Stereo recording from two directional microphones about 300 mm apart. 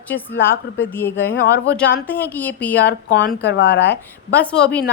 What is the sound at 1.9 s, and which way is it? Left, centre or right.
Speech, centre.